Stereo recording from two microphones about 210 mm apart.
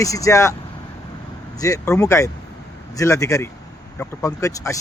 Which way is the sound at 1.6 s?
15° left (ahead or behind).